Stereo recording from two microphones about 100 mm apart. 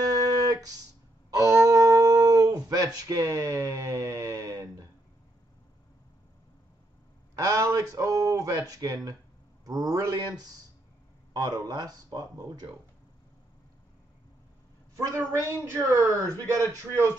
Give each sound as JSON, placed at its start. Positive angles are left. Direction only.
{"t": 0.0, "sound": "music", "side_deg": -40}
{"t": 1.3, "sound": "a sound", "side_deg": -35}
{"t": 7.3, "sound": "a sound", "side_deg": -35}
{"t": 7.9, "sound": "a man's voice", "side_deg": -35}
{"t": 11.3, "sound": "a man's voice", "side_deg": -40}
{"t": 15.0, "sound": "a man's voice", "side_deg": -30}